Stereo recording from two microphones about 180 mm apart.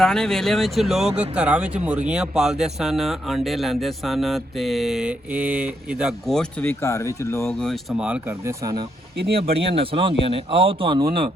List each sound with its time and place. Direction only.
0.0 s speech: 5° left (ahead or behind)
7.6 s speech: centre (ahead or behind); by 8.9 s 20° right (ahead or behind)
9.4 s speech: 30° right (ahead or behind)